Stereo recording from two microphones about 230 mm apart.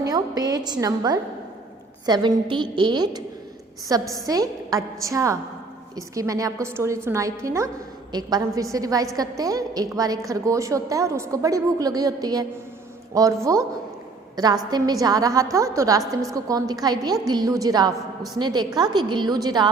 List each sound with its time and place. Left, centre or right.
0.0 s a woman's voice: centre